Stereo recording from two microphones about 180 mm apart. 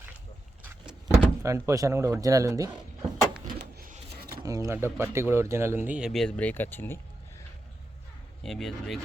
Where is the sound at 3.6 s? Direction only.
55° right (ahead or behind).